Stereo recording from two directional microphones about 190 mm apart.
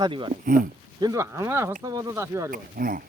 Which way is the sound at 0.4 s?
50° right (ahead or behind).